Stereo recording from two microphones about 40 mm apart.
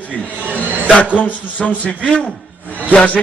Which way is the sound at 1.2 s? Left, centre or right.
Left.